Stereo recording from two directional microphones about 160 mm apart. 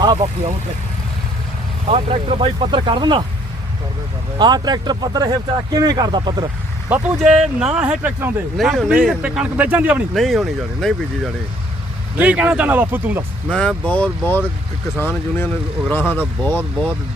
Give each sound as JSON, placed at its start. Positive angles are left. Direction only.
{"t": 0.0, "sound": "speech", "side_deg": -25}
{"t": 1.9, "sound": "speech", "side_deg": -40}
{"t": 4.4, "sound": "speech", "side_deg": -25}
{"t": 6.9, "sound": "speech", "side_deg": -5}
{"t": 8.5, "sound": "speech", "side_deg": 0}
{"t": 12.1, "sound": "speech", "side_deg": -10}
{"t": 13.5, "sound": "speech", "side_deg": 5}